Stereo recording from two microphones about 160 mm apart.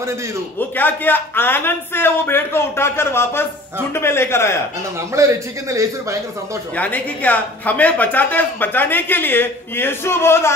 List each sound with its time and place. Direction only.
0.6 s a woman's voice: 10° left (ahead or behind)
5.1 s a man's voice: 20° right (ahead or behind)
6.7 s a woman's voice: 10° left (ahead or behind)